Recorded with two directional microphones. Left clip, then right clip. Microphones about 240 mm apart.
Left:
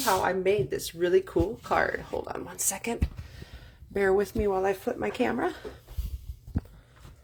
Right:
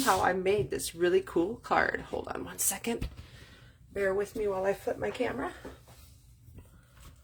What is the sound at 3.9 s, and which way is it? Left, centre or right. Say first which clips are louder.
Speech: left 5 dB; left.